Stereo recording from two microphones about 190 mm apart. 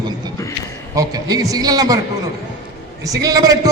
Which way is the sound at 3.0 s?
20° right (ahead or behind).